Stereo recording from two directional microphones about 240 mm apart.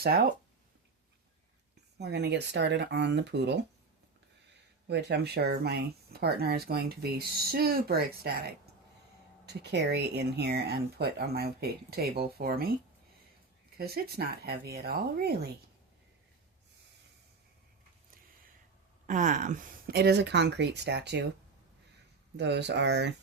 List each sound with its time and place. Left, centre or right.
0.0 s speech: right
2.0 s speech: right
4.9 s speech: right
13.7 s speech: right
19.0 s speech: right
22.4 s speech: right